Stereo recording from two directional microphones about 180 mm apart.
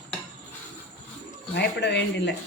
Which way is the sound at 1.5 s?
70° left (ahead or behind).